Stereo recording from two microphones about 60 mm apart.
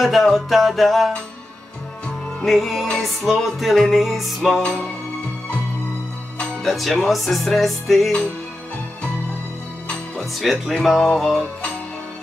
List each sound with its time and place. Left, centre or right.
0.0 s music: centre
2.4 s music: centre
4.6 s music: centre
6.3 s music: centre
6.7 s music: centre
10.7 s music: centre